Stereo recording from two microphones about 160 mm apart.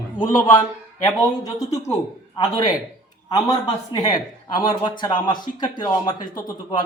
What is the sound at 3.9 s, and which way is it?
A man's voice, 25° left (ahead or behind).